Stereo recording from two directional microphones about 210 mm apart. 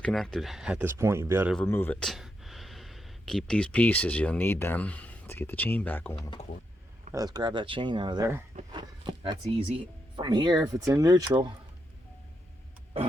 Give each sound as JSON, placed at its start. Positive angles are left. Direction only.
{"t": 0.0, "sound": "speech", "side_deg": 0}
{"t": 1.5, "sound": "speech", "side_deg": 10}
{"t": 7.1, "sound": "speech", "side_deg": -15}